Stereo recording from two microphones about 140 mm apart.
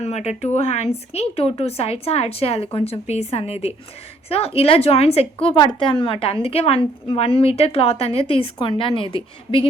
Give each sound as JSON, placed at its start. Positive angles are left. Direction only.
{"t": 0.0, "sound": "a woman's voice", "side_deg": 50}